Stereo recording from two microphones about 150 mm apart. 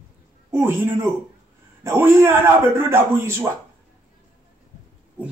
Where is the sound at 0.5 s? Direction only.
15° right (ahead or behind).